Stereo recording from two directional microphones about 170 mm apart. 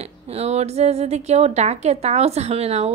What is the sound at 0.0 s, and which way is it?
A woman's voice, 40° right (ahead or behind).